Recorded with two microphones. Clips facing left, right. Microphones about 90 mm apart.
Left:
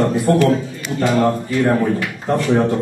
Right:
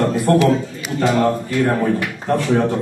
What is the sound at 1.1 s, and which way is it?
A man's voice, centre (ahead or behind).